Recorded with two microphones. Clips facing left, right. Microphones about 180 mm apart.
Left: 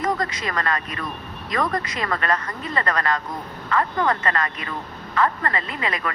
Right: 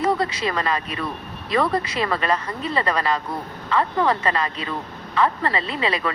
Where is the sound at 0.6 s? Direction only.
20° right (ahead or behind).